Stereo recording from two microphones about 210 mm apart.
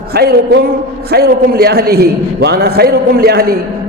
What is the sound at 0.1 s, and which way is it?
A man's voice, 50° right (ahead or behind).